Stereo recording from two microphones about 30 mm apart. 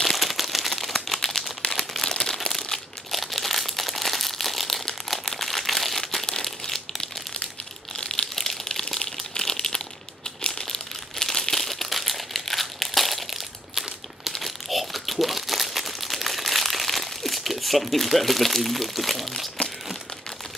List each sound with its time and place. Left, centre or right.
0.0 s crumpling: centre
1.6 s a sound: left
2.0 s crumpling: centre
3.1 s crumpling: centre
5.9 s crumpling: centre
7.9 s crumpling: left
8.4 s a sound: centre
9.4 s crumpling: centre
10.6 s crumpling: centre